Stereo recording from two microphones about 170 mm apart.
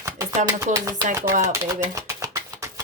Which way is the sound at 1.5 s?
20° right (ahead or behind).